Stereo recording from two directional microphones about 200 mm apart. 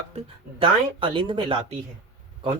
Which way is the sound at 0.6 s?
25° right (ahead or behind).